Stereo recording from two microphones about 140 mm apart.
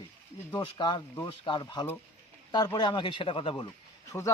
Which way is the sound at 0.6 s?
35° left (ahead or behind).